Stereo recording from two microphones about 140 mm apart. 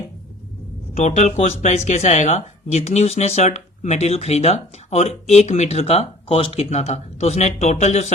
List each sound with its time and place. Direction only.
0.9 s speech: 50° left (ahead or behind)